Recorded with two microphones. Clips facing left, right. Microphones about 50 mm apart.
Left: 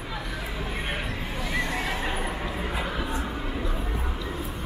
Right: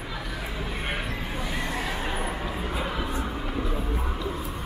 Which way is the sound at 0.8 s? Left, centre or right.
Centre.